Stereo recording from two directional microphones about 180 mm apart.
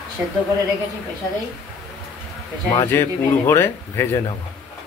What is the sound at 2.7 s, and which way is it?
Speech, 15° left (ahead or behind).